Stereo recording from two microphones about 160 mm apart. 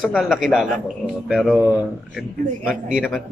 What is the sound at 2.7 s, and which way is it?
Mantra, 5° right (ahead or behind).